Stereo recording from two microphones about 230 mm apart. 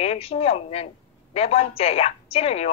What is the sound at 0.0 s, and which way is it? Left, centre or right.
A woman's voice, left.